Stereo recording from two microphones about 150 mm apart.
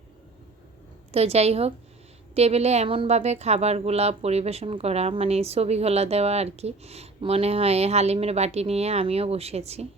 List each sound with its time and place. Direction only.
1.1 s speech: 45° right (ahead or behind)